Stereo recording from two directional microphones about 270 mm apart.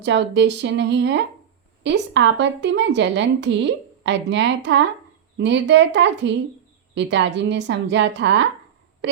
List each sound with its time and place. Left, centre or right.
0.0 s a woman's voice: right